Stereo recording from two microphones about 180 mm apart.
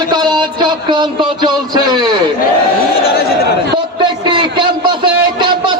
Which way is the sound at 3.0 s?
60° left (ahead or behind).